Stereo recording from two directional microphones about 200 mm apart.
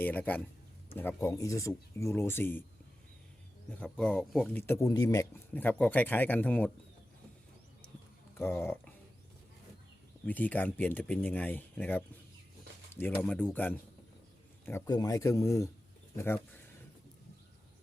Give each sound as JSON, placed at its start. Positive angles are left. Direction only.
{"t": 0.0, "sound": "speech", "side_deg": 10}
{"t": 3.7, "sound": "speech", "side_deg": 5}
{"t": 8.4, "sound": "speech", "side_deg": 10}
{"t": 10.2, "sound": "speech", "side_deg": 10}